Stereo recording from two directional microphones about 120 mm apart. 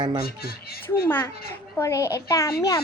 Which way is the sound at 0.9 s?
20° left (ahead or behind).